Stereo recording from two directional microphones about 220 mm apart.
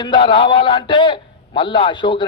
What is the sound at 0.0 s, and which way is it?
A man's voice, 20° left (ahead or behind).